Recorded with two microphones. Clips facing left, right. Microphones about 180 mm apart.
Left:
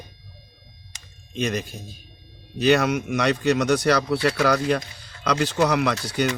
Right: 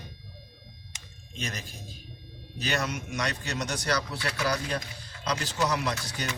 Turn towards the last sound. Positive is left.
turn(degrees=65)  # may be behind; listen again after turning